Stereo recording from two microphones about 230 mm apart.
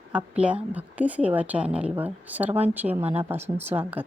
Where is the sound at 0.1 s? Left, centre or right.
Centre.